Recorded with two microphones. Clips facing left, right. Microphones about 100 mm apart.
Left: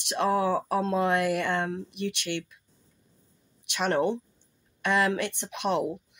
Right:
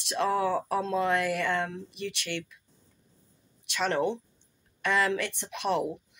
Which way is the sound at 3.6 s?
55° left (ahead or behind).